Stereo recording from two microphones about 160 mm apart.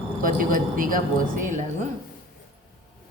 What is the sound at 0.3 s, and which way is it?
Speech, 60° right (ahead or behind).